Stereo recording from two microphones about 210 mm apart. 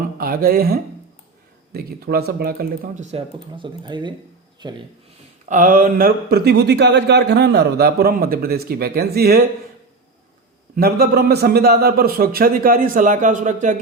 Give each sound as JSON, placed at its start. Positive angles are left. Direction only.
{"t": 0.0, "sound": "speech", "side_deg": -45}
{"t": 5.5, "sound": "speech", "side_deg": -40}
{"t": 10.8, "sound": "speech", "side_deg": -45}